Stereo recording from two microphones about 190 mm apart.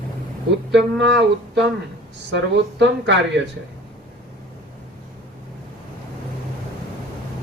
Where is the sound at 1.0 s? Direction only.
70° right (ahead or behind).